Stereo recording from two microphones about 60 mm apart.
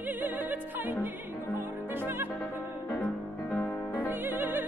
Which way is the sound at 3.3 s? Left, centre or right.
Left.